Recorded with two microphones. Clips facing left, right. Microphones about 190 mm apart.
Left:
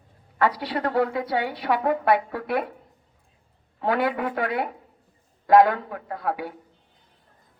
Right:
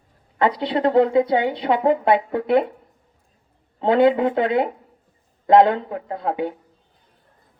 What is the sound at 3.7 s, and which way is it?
A woman's voice, 25° right (ahead or behind).